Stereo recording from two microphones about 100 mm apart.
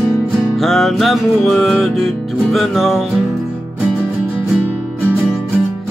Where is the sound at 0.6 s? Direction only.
5° left (ahead or behind).